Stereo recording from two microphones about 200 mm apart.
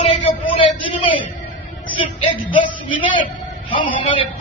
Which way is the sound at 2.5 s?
25° left (ahead or behind).